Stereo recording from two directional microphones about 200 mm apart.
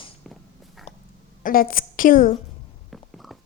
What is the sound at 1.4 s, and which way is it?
Speech, 45° left (ahead or behind).